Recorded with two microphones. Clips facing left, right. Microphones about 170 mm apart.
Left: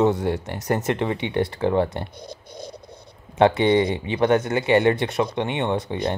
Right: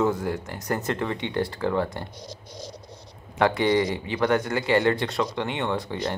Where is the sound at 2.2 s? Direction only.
55° left (ahead or behind).